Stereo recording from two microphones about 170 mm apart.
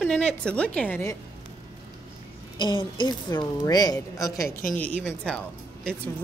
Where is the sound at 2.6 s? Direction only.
25° left (ahead or behind).